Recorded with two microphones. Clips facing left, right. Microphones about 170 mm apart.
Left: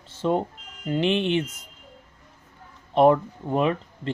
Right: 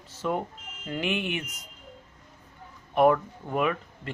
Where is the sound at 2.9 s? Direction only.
25° left (ahead or behind).